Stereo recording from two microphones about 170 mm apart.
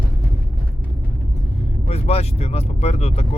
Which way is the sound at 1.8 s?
40° left (ahead or behind).